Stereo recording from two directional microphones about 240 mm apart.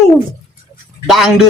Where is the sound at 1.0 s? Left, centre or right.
Centre.